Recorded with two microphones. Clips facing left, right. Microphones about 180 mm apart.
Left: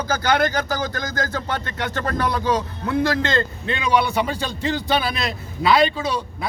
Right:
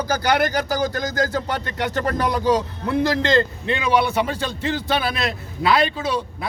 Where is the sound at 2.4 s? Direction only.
40° right (ahead or behind).